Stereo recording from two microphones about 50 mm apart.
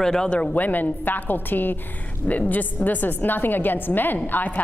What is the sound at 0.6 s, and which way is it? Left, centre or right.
A woman's voice, left.